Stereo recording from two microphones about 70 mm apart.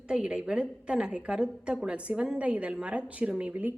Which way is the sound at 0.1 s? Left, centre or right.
Centre.